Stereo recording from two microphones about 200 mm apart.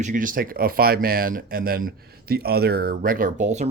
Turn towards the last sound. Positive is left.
turn(degrees=-35)  # may be behind; listen again after turning